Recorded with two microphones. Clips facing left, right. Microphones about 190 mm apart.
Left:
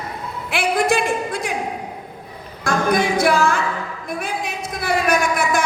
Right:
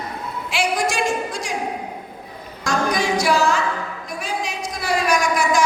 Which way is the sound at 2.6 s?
55° left (ahead or behind).